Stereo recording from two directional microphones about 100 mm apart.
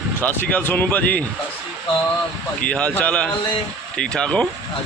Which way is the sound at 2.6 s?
10° left (ahead or behind).